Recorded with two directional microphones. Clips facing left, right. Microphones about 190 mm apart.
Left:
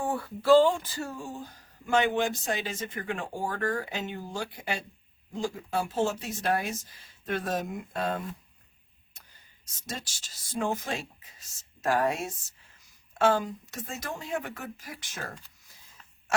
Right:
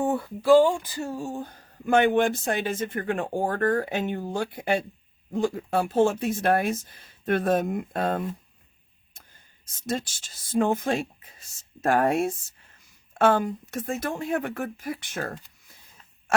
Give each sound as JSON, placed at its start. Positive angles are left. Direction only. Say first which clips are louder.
{"t": 0.0, "sound": "speech", "louder": "right 5 dB", "side_deg": -20}
{"t": 1.1, "sound": "speech", "louder": "right 7 dB", "side_deg": -45}